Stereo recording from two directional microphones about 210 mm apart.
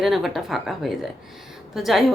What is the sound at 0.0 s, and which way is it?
Speech, centre (ahead or behind).